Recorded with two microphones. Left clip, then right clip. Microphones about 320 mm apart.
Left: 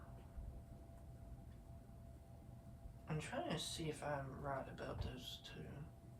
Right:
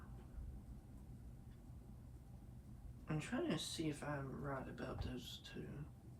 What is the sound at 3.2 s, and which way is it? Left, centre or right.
Speech, centre.